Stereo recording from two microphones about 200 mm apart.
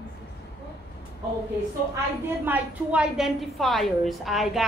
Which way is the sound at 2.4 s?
5° right (ahead or behind).